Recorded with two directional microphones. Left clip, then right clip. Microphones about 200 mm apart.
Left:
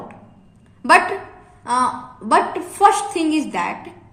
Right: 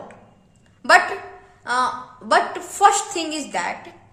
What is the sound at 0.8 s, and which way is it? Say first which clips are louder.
A woman's voice: left 1 dB; 15° right (ahead or behind).